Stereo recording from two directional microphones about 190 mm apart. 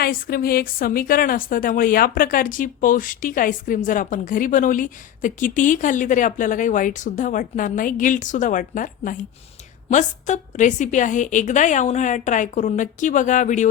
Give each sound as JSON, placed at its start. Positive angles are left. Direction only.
{"t": 0.0, "sound": "a woman's voice", "side_deg": 50}